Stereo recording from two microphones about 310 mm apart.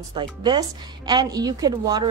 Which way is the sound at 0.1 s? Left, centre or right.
Centre.